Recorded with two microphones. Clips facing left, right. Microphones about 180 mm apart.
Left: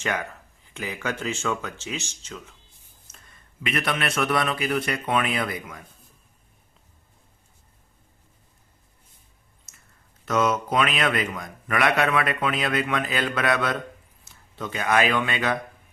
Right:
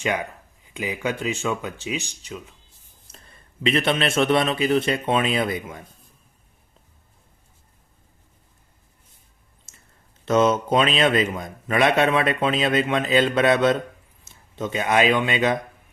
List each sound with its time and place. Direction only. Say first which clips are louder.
0.0 s speech: right 3 dB; 15° right (ahead or behind)
3.1 s a man's voice: right 5 dB; 30° right (ahead or behind)
9.7 s a sound: right 3 dB; 30° right (ahead or behind)
10.2 s a man's voice: right 5 dB; 25° right (ahead or behind)